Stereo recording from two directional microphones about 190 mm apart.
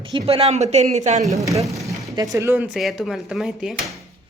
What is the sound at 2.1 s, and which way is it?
Speech, 20° right (ahead or behind).